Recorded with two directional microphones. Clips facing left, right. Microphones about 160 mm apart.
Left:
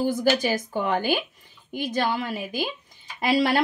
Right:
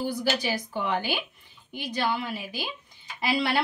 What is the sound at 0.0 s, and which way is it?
A woman's voice, 45° left (ahead or behind).